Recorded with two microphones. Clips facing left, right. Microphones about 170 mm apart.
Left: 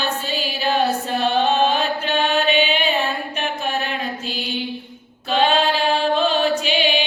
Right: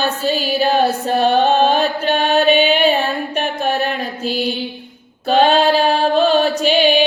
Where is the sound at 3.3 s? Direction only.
50° right (ahead or behind).